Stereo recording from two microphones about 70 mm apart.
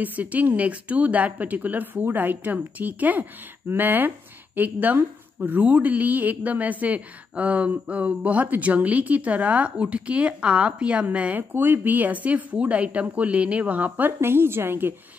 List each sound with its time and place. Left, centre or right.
0.0 s a woman's voice: right